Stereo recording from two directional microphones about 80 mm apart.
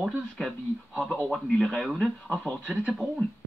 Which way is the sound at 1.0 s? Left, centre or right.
Centre.